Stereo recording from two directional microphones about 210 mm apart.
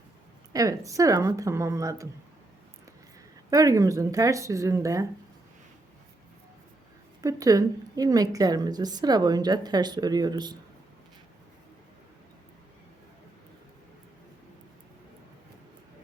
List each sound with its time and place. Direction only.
0.5 s speech: 15° right (ahead or behind)
3.5 s speech: 15° right (ahead or behind)
7.2 s a woman's voice: 15° right (ahead or behind)